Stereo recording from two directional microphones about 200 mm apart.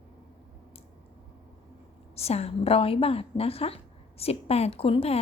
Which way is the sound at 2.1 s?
30° left (ahead or behind).